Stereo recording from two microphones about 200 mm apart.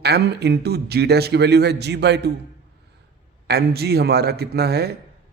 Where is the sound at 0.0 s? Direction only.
55° right (ahead or behind).